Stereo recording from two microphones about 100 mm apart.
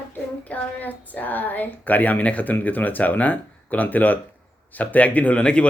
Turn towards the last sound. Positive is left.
turn(degrees=10)  # may be behind; listen again after turning